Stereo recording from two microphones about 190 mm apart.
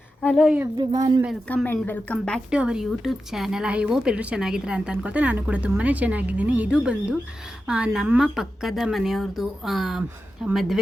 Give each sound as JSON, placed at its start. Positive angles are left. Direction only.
{"t": 0.2, "sound": "a woman's voice", "side_deg": 0}
{"t": 0.8, "sound": "a woman's voice", "side_deg": -20}
{"t": 1.5, "sound": "speech", "side_deg": 10}